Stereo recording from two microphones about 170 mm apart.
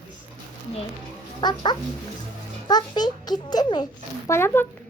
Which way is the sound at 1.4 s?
25° left (ahead or behind).